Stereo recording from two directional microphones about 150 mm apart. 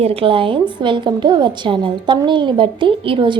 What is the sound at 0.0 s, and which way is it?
A woman's voice, 40° right (ahead or behind).